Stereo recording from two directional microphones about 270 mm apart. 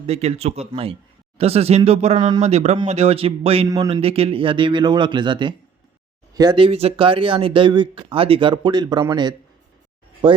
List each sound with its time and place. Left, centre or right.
0.1 s speech: right